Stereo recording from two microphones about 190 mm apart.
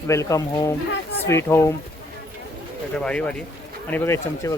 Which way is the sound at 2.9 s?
5° left (ahead or behind).